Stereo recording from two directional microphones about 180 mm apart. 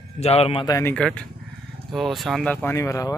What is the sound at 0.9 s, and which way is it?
A man's voice, 5° left (ahead or behind).